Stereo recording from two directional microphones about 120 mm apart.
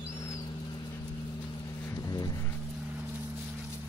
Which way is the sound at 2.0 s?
30° left (ahead or behind).